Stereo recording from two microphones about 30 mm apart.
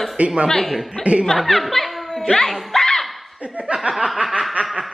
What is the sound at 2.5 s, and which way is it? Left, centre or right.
Music, centre.